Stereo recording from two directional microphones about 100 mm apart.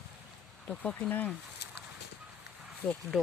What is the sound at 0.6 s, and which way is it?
Speech, 10° left (ahead or behind).